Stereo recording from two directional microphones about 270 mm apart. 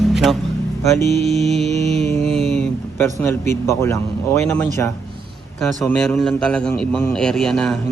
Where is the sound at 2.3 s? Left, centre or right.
Centre.